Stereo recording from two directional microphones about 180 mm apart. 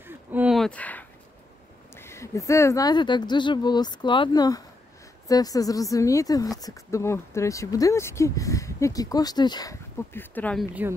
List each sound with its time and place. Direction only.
0.0 s a sound: 10° right (ahead or behind); by 1.0 s 10° left (ahead or behind)
2.0 s speech: 15° left (ahead or behind)
10.7 s speech: 10° right (ahead or behind)